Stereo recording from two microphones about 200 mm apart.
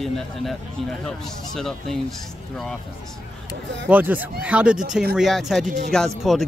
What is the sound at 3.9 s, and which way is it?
Speech, 10° right (ahead or behind).